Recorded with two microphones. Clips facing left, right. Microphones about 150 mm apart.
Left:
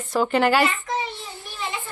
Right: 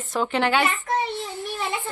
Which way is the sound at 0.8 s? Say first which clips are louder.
Right 2 dB; 55° right (ahead or behind).